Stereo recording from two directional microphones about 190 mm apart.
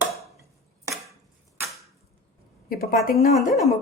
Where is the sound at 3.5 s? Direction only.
Centre (ahead or behind).